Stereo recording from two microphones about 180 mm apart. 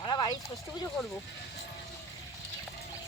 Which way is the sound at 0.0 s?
25° left (ahead or behind).